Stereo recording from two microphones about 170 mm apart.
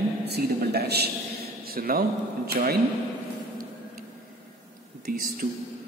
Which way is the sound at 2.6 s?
50° right (ahead or behind).